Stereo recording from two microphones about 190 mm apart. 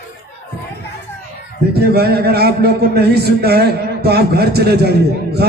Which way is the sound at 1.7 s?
55° right (ahead or behind).